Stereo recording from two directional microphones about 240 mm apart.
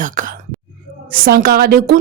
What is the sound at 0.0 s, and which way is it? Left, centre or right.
Speech, right.